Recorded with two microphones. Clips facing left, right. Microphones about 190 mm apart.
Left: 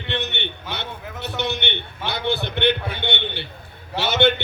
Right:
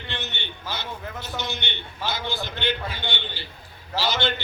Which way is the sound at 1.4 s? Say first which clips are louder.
Left 9 dB; 65° left (ahead or behind).